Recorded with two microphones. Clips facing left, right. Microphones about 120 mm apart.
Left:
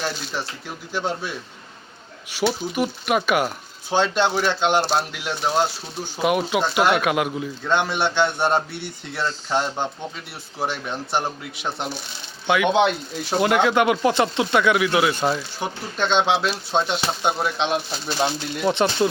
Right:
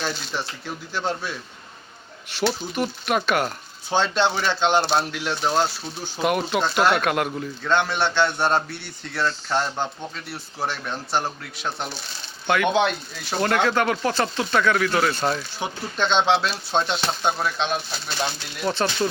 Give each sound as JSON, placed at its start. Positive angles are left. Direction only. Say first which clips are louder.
{"t": 0.9, "sound": "speech", "louder": "left 1 dB", "side_deg": 10}
{"t": 12.5, "sound": "speech", "louder": "left 2 dB", "side_deg": 5}